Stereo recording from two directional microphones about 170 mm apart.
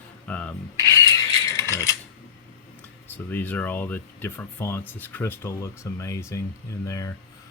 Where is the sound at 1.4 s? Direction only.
20° left (ahead or behind).